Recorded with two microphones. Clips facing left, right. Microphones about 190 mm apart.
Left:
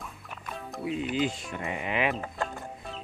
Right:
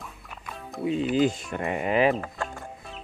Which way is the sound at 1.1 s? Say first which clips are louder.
Right 6 dB; 40° right (ahead or behind).